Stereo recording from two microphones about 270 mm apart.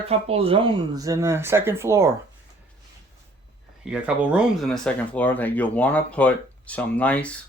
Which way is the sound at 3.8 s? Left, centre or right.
Centre.